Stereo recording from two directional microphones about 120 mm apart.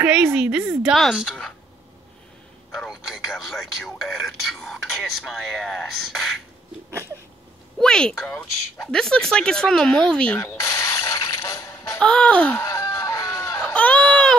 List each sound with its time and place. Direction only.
0.0 s a woman's voice: 5° right (ahead or behind)
2.7 s speech: centre (ahead or behind)
7.8 s speech: 5° left (ahead or behind)
10.4 s a sound: 25° left (ahead or behind)
12.0 s speech: 10° left (ahead or behind)
12.6 s chicken: 30° left (ahead or behind)
13.7 s a sound: 10° left (ahead or behind)